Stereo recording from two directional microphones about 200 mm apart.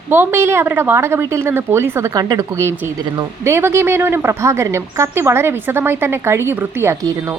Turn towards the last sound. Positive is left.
turn(degrees=-10)  # may be behind; listen again after turning